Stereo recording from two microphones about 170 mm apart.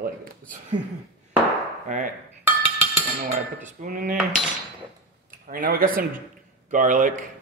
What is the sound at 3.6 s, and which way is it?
Speech, 50° right (ahead or behind).